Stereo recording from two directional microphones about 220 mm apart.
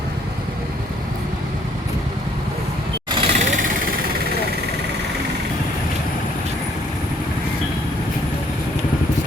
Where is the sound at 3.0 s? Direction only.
25° right (ahead or behind).